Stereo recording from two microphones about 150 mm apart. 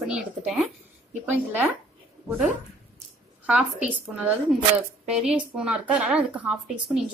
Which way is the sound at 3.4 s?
10° right (ahead or behind).